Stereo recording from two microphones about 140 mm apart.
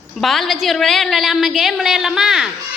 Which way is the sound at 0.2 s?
Centre (ahead or behind).